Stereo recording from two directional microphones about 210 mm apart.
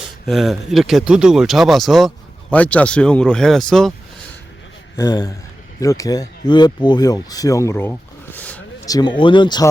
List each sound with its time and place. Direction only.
0.3 s speech: centre (ahead or behind)
4.9 s a man's voice: 15° left (ahead or behind)
9.0 s speech: 20° left (ahead or behind)